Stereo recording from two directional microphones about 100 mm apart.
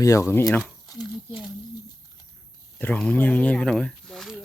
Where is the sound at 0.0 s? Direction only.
30° left (ahead or behind).